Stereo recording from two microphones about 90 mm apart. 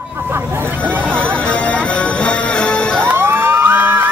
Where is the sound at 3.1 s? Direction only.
25° right (ahead or behind).